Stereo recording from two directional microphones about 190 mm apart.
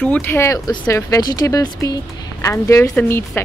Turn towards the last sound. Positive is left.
turn(degrees=10)  # may be behind; listen again after turning